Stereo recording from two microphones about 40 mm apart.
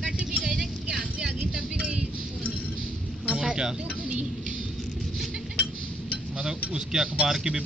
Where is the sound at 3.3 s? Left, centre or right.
Centre.